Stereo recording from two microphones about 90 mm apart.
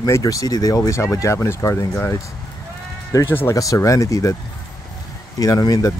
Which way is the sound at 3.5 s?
40° left (ahead or behind).